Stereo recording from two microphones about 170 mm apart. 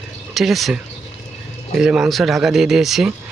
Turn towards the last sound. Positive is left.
turn(degrees=0)  # may be behind; listen again after turning